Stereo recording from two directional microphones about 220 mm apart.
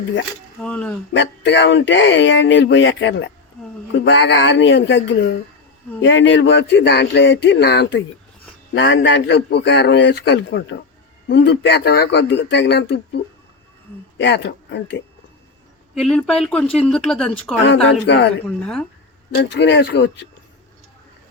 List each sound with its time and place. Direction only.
0.6 s speech: 5° left (ahead or behind)
1.1 s a man's voice: 55° left (ahead or behind)
16.0 s speech: centre (ahead or behind)
18.0 s a man's voice: 50° left (ahead or behind)
18.4 s speech: 5° left (ahead or behind)
19.3 s a man's voice: 50° left (ahead or behind)